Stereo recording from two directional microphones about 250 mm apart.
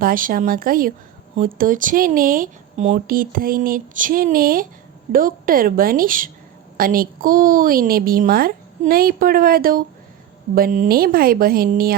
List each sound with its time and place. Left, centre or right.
0.0 s speech: right